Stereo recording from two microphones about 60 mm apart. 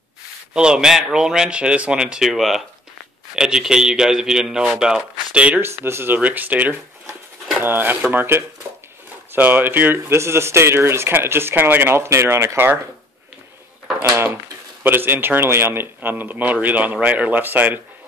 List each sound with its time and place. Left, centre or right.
0.6 s speech: centre
5.6 s speech: right
6.1 s speech: right
14.0 s speech: right